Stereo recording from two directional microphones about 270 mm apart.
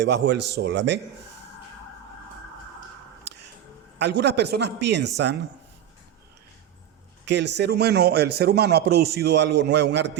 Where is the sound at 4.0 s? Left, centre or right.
Right.